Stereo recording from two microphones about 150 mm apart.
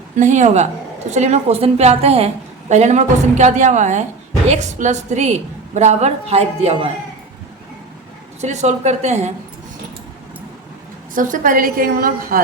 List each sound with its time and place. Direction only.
0.2 s a woman's voice: 50° right (ahead or behind)
8.4 s a woman's voice: 50° right (ahead or behind)
11.1 s a woman's voice: 60° right (ahead or behind)